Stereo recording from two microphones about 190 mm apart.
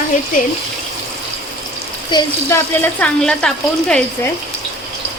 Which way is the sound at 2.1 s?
25° left (ahead or behind).